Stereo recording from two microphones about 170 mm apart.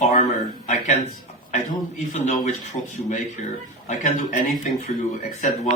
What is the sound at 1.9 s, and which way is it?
A man's voice, 45° left (ahead or behind).